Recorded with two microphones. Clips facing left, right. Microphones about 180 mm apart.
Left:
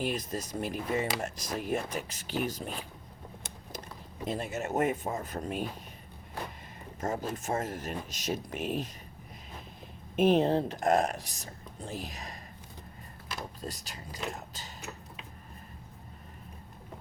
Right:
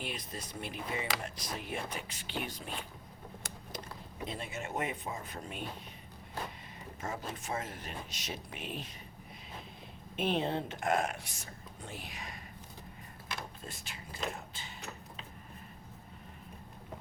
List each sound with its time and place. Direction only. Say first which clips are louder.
0.0 s speech: left 9 dB; 45° left (ahead or behind)
4.3 s speech: left 8 dB; 45° left (ahead or behind)
7.0 s speech: left 7 dB; 40° left (ahead or behind)
10.2 s speech: left 8 dB; 40° left (ahead or behind)
13.6 s speech: left 6 dB; 40° left (ahead or behind)